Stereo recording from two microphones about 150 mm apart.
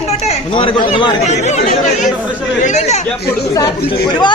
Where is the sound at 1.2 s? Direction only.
50° left (ahead or behind).